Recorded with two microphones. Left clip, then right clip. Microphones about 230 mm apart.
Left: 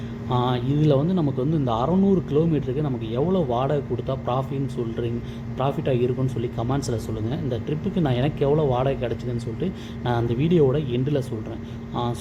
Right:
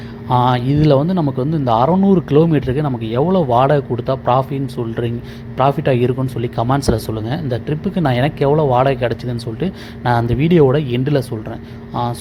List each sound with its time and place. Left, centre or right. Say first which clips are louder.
0.3 s a man's voice: right 9 dB; right